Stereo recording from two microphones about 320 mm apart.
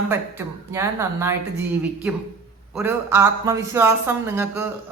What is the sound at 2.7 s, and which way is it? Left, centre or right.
Speech, centre.